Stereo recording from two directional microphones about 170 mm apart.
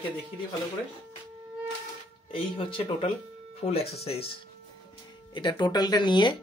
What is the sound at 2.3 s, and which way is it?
Speech, 30° left (ahead or behind).